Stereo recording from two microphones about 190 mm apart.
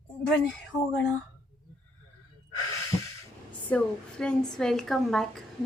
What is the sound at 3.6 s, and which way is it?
A woman's voice, 5° left (ahead or behind).